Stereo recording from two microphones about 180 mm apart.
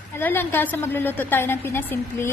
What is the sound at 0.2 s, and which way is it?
A woman's voice, 10° left (ahead or behind).